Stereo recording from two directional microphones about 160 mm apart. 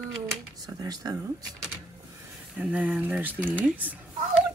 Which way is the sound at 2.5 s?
10° right (ahead or behind).